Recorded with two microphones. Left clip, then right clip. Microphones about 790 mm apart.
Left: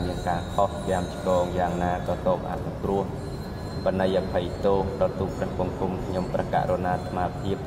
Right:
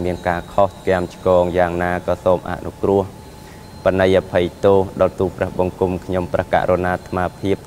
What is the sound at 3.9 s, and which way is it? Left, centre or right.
Speech, right.